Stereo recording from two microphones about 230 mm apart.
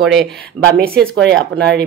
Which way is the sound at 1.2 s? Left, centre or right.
Right.